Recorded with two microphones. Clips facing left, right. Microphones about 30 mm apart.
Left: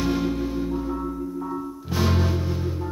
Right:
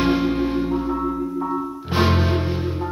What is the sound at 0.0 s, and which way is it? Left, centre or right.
Music, right.